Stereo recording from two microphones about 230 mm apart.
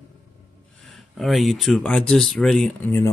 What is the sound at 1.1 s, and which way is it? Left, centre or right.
Speech, centre.